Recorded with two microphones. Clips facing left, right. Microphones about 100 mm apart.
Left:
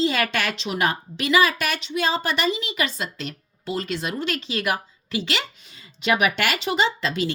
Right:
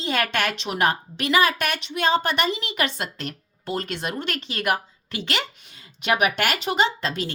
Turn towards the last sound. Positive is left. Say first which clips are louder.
# left 2 dB
turn(degrees=-45)  # may be behind; listen again after turning